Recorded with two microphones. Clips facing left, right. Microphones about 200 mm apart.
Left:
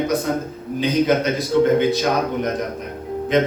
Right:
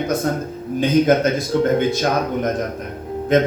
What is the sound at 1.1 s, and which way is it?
Speech, 50° right (ahead or behind).